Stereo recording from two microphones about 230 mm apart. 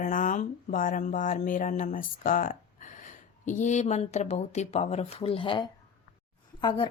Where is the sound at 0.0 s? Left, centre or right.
Left.